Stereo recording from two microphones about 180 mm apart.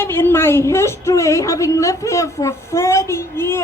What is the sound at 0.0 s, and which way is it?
Speech, 10° left (ahead or behind).